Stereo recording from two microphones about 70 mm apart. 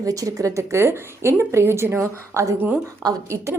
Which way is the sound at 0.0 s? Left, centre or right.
Right.